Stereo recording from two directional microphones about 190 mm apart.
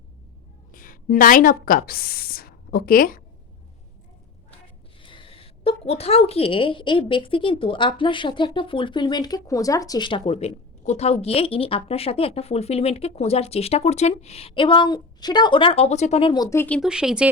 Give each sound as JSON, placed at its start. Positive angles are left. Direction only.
{"t": 0.7, "sound": "a woman's voice", "side_deg": 45}
{"t": 5.0, "sound": "a woman's voice", "side_deg": 25}
{"t": 16.3, "sound": "speech", "side_deg": 20}
{"t": 16.9, "sound": "speech", "side_deg": -5}